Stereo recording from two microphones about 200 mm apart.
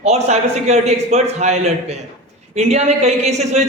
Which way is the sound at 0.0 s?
35° right (ahead or behind).